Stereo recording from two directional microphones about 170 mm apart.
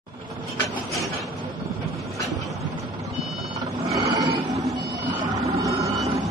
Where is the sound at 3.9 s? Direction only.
20° right (ahead or behind).